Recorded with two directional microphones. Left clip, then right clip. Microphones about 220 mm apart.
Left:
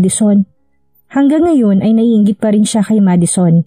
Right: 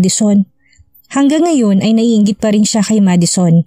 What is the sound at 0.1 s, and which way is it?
A woman's voice, 30° right (ahead or behind).